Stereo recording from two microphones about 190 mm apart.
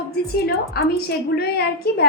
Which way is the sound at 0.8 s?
55° left (ahead or behind).